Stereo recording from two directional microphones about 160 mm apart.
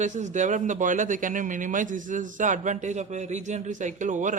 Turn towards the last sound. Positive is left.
turn(degrees=-50)  # may be behind; listen again after turning